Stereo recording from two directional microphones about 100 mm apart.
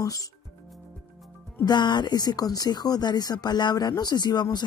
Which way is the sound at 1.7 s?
50° left (ahead or behind).